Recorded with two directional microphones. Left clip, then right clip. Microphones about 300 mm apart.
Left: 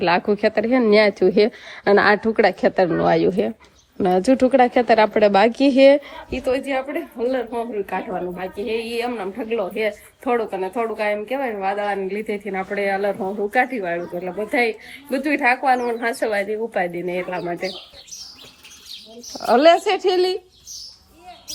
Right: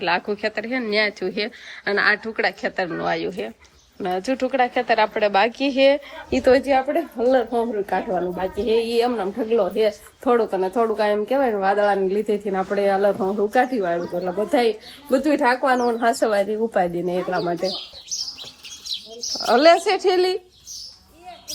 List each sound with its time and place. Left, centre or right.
0.3 s speech: centre
6.3 s a woman's voice: right
19.3 s speech: centre